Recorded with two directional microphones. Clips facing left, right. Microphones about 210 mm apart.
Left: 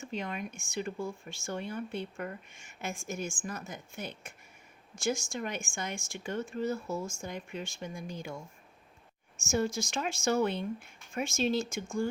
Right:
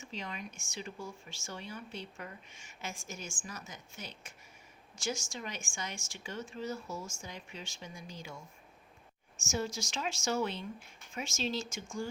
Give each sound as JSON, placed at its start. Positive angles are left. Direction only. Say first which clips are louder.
{"t": 0.0, "sound": "speech", "louder": "left 6 dB", "side_deg": 55}
{"t": 9.4, "sound": "speech", "louder": "left 6 dB", "side_deg": 55}